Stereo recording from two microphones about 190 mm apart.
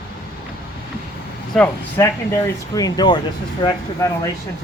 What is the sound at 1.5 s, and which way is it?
Speech, 10° left (ahead or behind).